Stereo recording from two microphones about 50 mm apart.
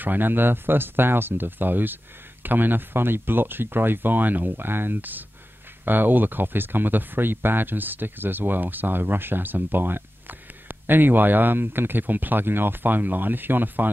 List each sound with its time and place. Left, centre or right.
0.0 s speech: right